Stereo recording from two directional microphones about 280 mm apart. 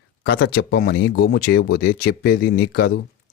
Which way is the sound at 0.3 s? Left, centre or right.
Left.